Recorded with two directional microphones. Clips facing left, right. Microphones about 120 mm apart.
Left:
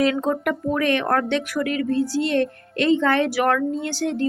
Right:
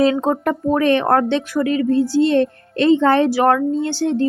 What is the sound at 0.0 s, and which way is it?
Speech, 30° right (ahead or behind).